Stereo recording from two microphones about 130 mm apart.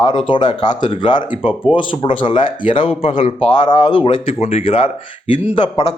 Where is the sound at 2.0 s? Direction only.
40° left (ahead or behind).